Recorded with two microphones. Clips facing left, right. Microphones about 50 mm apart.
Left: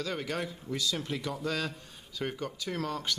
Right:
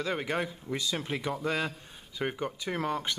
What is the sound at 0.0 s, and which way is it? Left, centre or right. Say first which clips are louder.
Speech: right 3 dB; right.